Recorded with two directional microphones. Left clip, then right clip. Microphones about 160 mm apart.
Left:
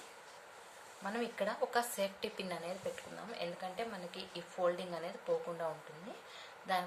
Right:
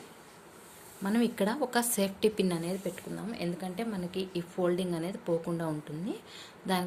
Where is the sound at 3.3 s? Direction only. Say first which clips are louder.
Right 3 dB; 50° right (ahead or behind).